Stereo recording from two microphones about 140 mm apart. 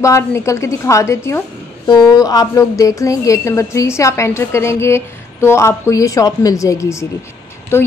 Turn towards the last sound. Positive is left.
turn(degrees=15)  # may be behind; listen again after turning